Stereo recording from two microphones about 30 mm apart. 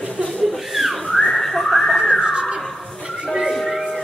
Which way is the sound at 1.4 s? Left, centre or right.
Centre.